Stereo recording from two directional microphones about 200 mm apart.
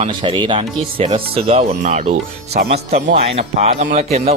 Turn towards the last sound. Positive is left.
turn(degrees=-35)  # may be behind; listen again after turning